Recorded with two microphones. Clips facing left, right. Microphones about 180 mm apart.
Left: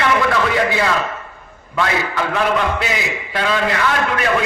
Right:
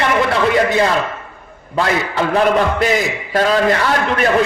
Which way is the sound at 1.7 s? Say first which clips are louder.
Right 2 dB; 35° right (ahead or behind).